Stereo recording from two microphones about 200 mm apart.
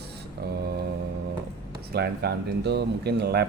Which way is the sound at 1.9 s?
50° right (ahead or behind).